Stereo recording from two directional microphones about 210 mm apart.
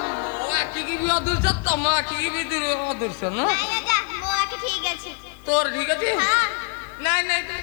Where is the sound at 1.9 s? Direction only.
15° left (ahead or behind).